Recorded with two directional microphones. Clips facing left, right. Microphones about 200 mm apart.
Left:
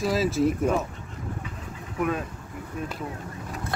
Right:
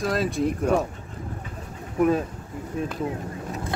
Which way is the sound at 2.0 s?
35° right (ahead or behind).